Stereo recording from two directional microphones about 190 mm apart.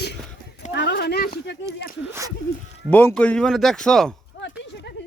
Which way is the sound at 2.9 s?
10° left (ahead or behind).